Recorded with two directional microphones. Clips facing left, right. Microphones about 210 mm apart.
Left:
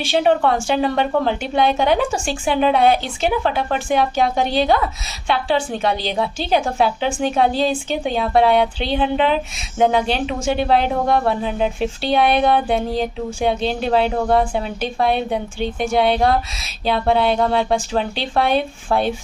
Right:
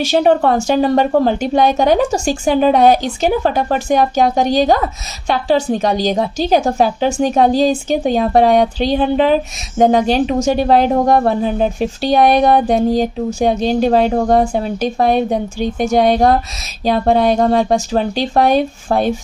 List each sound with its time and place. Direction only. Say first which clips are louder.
0.0 s a woman's voice: right 4 dB; 40° right (ahead or behind)